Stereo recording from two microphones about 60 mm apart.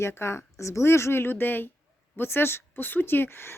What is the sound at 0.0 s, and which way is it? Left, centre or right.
Speech, left.